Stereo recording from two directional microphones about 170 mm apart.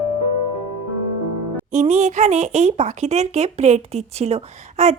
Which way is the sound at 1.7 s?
45° right (ahead or behind).